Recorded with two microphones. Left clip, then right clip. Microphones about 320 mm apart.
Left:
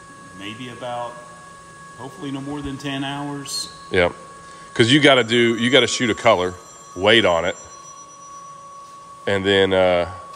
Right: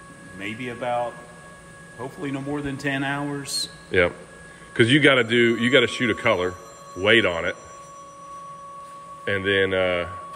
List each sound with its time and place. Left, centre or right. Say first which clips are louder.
0.6 s speech: right 4 dB; centre
2.2 s speech: even; centre
9.2 s speech: left 4 dB; centre